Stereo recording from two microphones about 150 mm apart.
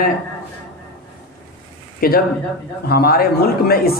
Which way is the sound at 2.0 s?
85° left.